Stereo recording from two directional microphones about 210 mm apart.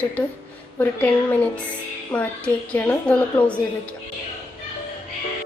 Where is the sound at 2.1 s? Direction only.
5° left (ahead or behind).